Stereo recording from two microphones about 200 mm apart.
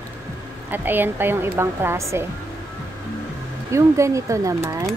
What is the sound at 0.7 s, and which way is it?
Speech, 10° right (ahead or behind).